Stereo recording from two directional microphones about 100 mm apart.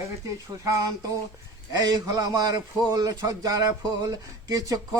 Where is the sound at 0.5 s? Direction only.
40° right (ahead or behind).